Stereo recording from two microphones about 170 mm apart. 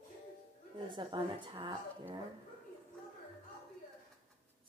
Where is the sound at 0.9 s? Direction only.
25° right (ahead or behind).